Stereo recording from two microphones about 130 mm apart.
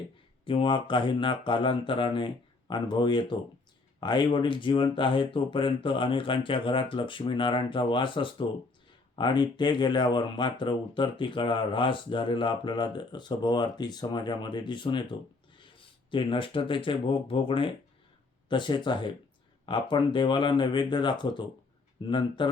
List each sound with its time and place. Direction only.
0.4 s speech: 40° left (ahead or behind)
16.1 s speech: 40° left (ahead or behind)